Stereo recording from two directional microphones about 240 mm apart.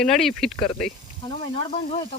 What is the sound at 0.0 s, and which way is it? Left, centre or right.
Speech, centre.